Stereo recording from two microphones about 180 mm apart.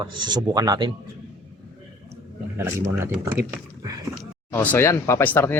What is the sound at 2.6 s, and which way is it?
Speech, 15° right (ahead or behind).